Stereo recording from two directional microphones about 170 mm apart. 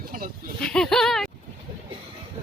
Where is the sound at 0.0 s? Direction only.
55° right (ahead or behind).